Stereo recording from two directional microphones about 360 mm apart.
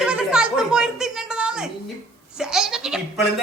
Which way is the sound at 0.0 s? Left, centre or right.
Centre.